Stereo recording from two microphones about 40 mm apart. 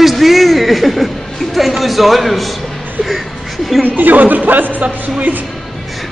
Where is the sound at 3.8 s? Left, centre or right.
Right.